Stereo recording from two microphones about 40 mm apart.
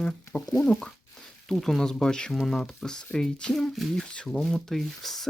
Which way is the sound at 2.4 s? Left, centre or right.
Centre.